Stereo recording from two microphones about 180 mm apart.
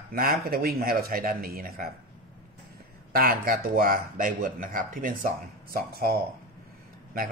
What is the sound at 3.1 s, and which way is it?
Speech, 55° right (ahead or behind).